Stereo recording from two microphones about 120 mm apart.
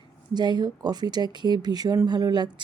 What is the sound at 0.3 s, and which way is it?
Speech, 35° right (ahead or behind).